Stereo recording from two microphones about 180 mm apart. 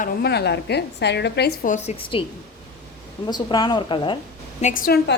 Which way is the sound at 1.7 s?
35° left (ahead or behind).